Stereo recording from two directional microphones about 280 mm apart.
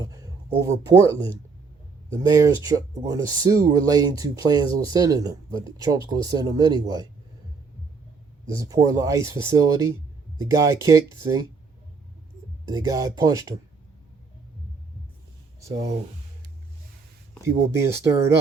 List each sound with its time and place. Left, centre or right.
0.0 s speech: centre
8.4 s speech: centre
12.6 s speech: centre
17.4 s speech: centre